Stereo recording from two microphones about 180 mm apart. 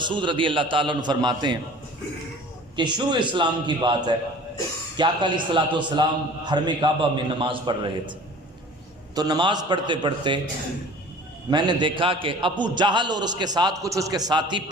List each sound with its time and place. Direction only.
0.0 s a man's voice: 25° right (ahead or behind)
2.7 s a man's voice: 25° right (ahead or behind)
9.1 s a man's voice: 20° right (ahead or behind)
11.5 s a man's voice: 25° right (ahead or behind)